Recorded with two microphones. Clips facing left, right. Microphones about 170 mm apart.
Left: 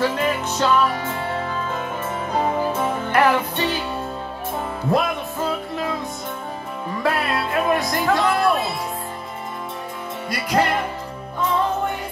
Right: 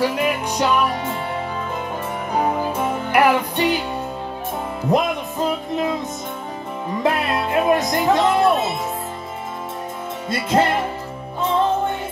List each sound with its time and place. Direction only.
0.0 s music: 10° right (ahead or behind)
2.3 s music: 10° right (ahead or behind)
4.9 s music: 20° right (ahead or behind)
7.0 s speech: 20° right (ahead or behind)
10.3 s music: 25° right (ahead or behind)